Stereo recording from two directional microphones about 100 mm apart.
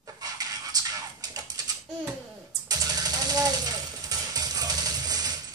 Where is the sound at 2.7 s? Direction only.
40° right (ahead or behind).